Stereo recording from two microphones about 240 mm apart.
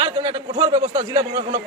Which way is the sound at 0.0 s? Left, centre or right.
Centre.